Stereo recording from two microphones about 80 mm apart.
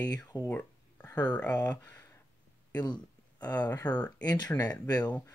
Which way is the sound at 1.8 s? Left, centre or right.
Left.